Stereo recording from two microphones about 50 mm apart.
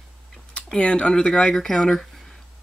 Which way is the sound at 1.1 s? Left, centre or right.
Centre.